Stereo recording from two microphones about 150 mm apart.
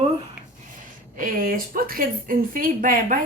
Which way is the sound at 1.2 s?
70° right (ahead or behind).